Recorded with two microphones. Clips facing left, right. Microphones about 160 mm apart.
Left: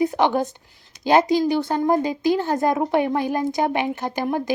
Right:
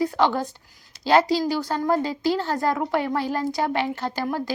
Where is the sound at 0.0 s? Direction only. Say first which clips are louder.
Left 2 dB; 20° left (ahead or behind).